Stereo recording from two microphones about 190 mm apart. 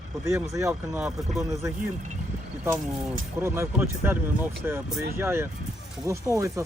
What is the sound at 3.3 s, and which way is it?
Speech, 15° right (ahead or behind).